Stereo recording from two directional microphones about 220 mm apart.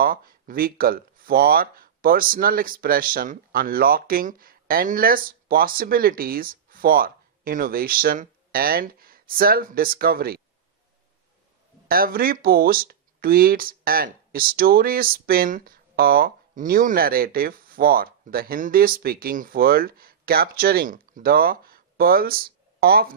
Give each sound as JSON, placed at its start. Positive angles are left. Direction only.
{"t": 0.0, "sound": "speech", "side_deg": -40}
{"t": 11.9, "sound": "speech", "side_deg": -40}